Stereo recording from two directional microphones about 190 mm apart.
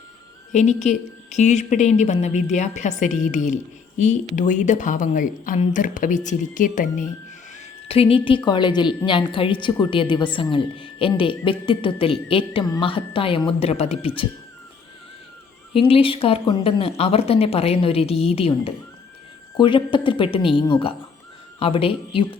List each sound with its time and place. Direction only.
0.5 s a woman's voice: 35° left (ahead or behind)
7.9 s a woman's voice: 30° left (ahead or behind)
15.7 s a woman's voice: 30° left (ahead or behind)